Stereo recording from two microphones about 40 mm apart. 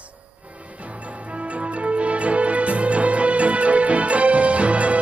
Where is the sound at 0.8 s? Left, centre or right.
Right.